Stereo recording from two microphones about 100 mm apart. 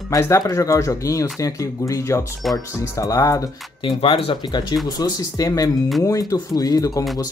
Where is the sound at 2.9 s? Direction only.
35° left (ahead or behind).